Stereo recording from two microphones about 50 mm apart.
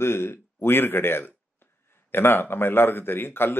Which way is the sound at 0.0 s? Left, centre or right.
Left.